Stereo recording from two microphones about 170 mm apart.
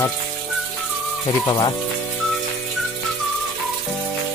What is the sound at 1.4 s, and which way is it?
Speech, 25° left (ahead or behind).